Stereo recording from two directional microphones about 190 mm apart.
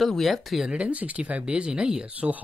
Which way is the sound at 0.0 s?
Centre (ahead or behind).